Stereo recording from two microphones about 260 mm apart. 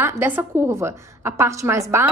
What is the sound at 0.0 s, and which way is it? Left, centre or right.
A woman's voice, centre.